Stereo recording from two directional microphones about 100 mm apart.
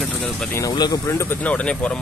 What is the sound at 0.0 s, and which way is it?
Vehicle, 5° left (ahead or behind).